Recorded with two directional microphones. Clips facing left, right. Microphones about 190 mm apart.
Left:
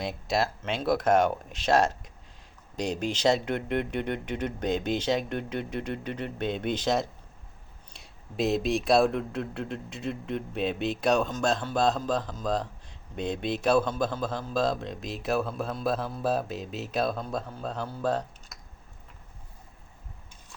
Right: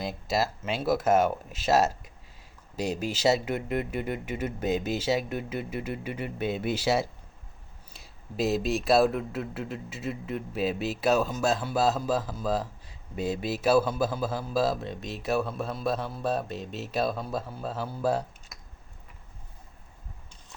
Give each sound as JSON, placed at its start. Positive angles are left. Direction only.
{"t": 0.0, "sound": "speech", "side_deg": 0}